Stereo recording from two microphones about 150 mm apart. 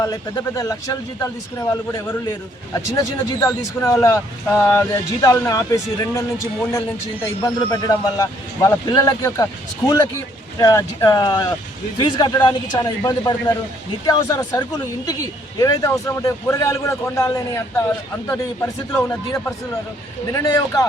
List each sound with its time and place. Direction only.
0.0 s a man's voice: 20° left (ahead or behind)
7.4 s a man's voice: 25° left (ahead or behind)